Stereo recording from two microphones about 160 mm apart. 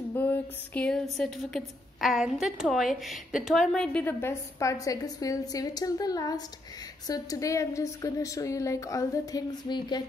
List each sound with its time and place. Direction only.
0.1 s female singing: 10° left (ahead or behind)
1.1 s a woman's voice: centre (ahead or behind); by 10.0 s 30° left (ahead or behind)